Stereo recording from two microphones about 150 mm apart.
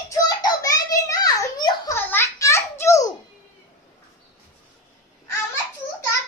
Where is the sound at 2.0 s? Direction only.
15° left (ahead or behind).